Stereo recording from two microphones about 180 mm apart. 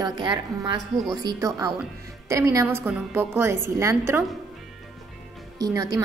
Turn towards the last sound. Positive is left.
turn(degrees=-20)  # may be behind; listen again after turning